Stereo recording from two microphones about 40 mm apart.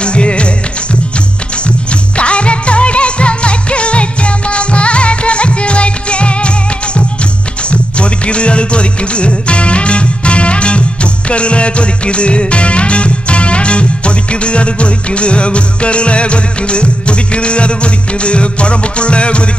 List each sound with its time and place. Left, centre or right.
0.0 s music: left
1.9 s music: left